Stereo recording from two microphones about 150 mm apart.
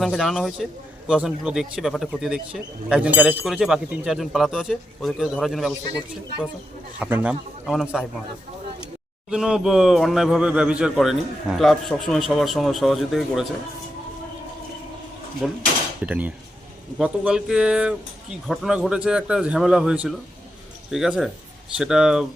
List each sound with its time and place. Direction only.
0.0 s a man's voice: centre (ahead or behind)
7.0 s a man's voice: 10° right (ahead or behind)
9.3 s a man's voice: 5° right (ahead or behind)
15.4 s a man's voice: centre (ahead or behind)